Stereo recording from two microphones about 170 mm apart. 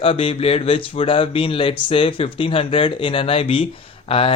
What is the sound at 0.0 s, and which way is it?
Speech, 30° left (ahead or behind).